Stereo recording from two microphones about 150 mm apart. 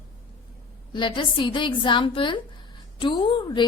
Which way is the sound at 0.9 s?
35° left (ahead or behind).